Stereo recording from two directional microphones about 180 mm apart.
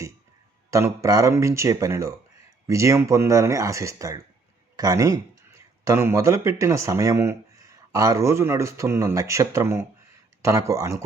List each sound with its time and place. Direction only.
0.7 s speech: 20° right (ahead or behind)